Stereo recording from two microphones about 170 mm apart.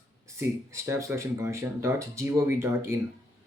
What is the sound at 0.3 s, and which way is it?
Speech, 15° right (ahead or behind).